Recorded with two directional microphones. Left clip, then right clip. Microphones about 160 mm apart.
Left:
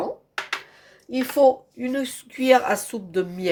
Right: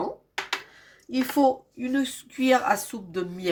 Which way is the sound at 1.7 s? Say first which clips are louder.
Left 1 dB; 40° left (ahead or behind).